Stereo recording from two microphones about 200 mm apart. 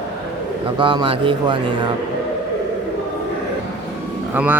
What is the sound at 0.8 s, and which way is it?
Speech, 25° right (ahead or behind).